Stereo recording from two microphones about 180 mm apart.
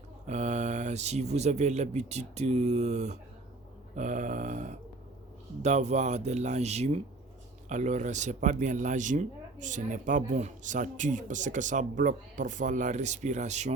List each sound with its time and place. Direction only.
0.3 s speech: 40° right (ahead or behind)